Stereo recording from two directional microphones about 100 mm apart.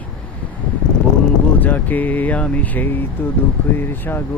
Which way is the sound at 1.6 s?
15° left (ahead or behind).